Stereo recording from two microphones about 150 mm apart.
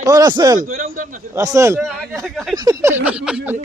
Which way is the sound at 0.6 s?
65° right (ahead or behind).